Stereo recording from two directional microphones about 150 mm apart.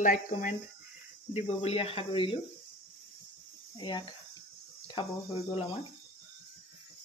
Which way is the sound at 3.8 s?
30° left (ahead or behind).